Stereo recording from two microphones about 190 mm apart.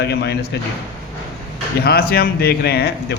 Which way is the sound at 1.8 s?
55° left (ahead or behind).